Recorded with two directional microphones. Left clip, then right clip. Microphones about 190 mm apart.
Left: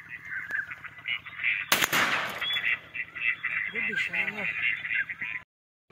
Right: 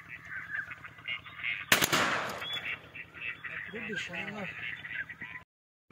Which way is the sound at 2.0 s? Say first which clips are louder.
Left 4 dB; 30° right (ahead or behind).